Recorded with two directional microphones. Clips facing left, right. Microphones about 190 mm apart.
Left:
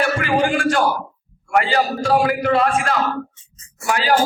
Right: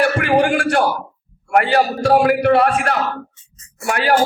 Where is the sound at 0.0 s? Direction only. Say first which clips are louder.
Right 3 dB; 65° right (ahead or behind).